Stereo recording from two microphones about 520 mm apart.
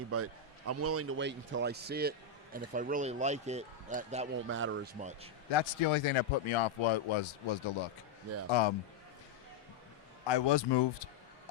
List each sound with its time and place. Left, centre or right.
0.1 s a man's voice: right
5.5 s a man's voice: left
10.2 s a man's voice: left